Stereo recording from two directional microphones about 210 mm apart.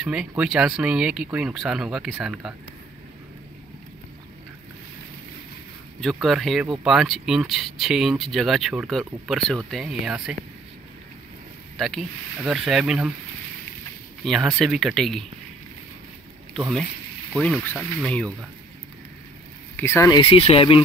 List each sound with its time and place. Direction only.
0.0 s speech: 5° right (ahead or behind)
6.2 s speech: centre (ahead or behind)
11.7 s speech: centre (ahead or behind)
14.2 s speech: centre (ahead or behind)
16.5 s speech: centre (ahead or behind)
19.8 s speech: 15° left (ahead or behind)
20.2 s speech: 25° left (ahead or behind)